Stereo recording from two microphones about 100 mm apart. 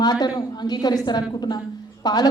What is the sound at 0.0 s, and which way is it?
A woman's voice, 45° left (ahead or behind).